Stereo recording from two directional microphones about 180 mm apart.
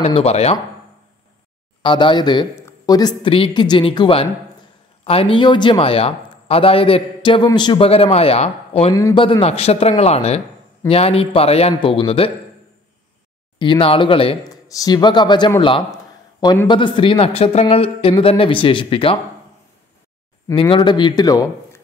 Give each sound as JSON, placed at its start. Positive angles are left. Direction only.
{"t": 0.0, "sound": "speech", "side_deg": 35}
{"t": 1.8, "sound": "speech", "side_deg": 25}
{"t": 8.9, "sound": "speech", "side_deg": 25}
{"t": 13.6, "sound": "a man's voice", "side_deg": 30}
{"t": 20.5, "sound": "speech", "side_deg": 25}